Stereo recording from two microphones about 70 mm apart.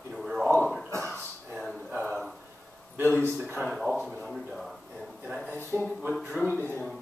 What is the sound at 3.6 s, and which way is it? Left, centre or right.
Speech, centre.